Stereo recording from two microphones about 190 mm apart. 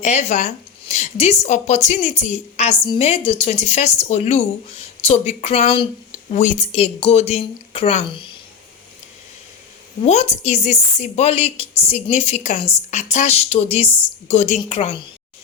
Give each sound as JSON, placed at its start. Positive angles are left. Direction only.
{"t": 0.0, "sound": "a woman's voice", "side_deg": 35}
{"t": 10.0, "sound": "a woman's voice", "side_deg": 35}